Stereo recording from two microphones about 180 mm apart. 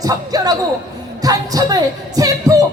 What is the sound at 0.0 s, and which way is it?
Speech, 20° right (ahead or behind).